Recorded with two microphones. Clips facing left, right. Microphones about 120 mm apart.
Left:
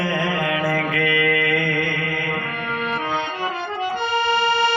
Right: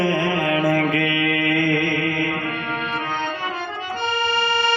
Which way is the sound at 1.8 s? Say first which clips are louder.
Right 3 dB; 50° right (ahead or behind).